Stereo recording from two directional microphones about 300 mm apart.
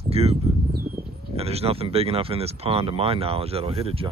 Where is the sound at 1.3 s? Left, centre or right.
Centre.